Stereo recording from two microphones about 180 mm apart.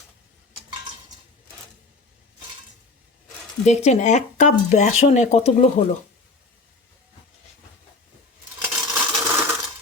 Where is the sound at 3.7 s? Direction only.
40° left (ahead or behind).